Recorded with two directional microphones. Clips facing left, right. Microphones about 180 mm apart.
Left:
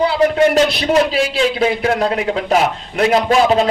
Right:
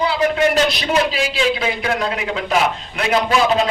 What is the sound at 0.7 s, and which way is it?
A man's voice, 45° left (ahead or behind).